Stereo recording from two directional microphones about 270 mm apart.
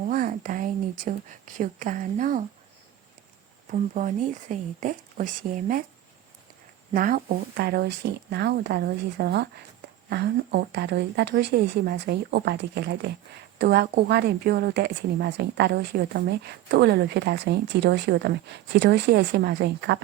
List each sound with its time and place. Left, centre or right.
0.0 s speech: right
3.7 s speech: right
6.9 s a woman's voice: right